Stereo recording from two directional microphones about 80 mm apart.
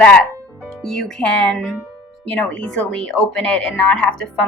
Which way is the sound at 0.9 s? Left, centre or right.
Centre.